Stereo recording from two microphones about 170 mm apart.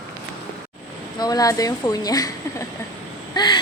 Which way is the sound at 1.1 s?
20° left (ahead or behind).